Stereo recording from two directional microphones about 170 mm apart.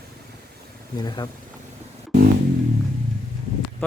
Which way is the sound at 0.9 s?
25° left (ahead or behind).